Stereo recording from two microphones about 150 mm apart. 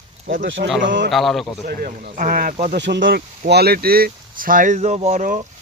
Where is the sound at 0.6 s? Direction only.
90° right.